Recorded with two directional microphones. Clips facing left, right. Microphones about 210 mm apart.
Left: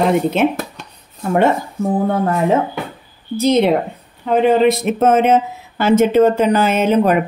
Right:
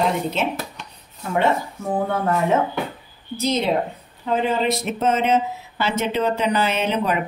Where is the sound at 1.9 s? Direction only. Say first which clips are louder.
Left 4 dB; 35° left (ahead or behind).